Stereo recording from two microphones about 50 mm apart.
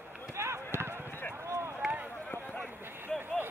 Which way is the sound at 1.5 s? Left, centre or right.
Right.